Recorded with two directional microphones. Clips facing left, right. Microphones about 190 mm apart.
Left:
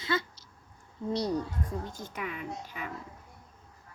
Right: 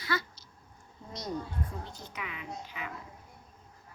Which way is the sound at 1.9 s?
50° left (ahead or behind).